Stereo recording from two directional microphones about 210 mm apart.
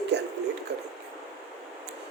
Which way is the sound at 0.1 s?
55° right (ahead or behind).